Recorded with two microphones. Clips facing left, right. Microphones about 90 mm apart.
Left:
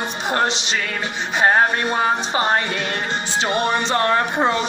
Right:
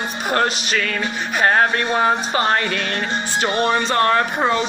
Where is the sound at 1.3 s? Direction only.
25° left (ahead or behind).